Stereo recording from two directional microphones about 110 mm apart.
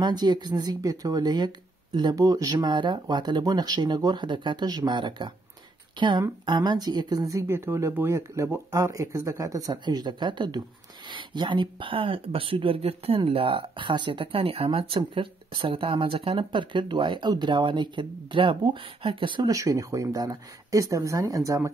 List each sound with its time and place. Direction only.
0.0 s speech: 40° right (ahead or behind)
19.5 s speech: 30° right (ahead or behind)